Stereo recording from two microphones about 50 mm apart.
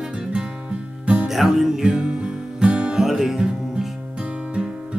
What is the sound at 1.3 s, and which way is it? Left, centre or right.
Music, centre.